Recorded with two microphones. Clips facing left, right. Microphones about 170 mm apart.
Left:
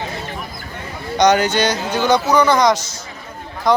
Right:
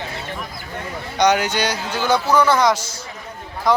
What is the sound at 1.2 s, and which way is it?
Speech, 10° right (ahead or behind).